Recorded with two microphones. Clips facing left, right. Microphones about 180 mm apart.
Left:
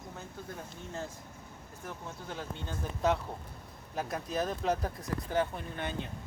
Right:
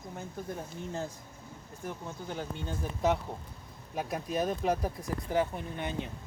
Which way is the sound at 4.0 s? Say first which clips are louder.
Right 2 dB; 5° right (ahead or behind).